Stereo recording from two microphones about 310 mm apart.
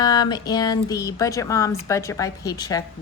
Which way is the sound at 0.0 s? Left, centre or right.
Centre.